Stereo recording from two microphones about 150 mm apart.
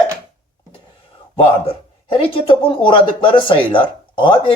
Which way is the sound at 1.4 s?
40° left (ahead or behind).